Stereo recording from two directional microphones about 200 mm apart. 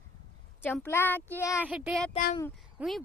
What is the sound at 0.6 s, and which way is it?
Speech, 10° left (ahead or behind).